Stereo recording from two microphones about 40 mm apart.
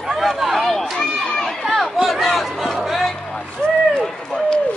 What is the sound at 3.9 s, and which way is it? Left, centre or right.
Run, centre.